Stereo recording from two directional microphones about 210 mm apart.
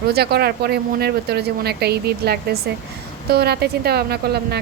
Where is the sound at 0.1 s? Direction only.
50° right (ahead or behind).